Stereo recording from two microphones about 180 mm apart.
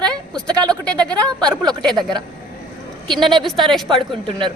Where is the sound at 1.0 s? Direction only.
20° right (ahead or behind).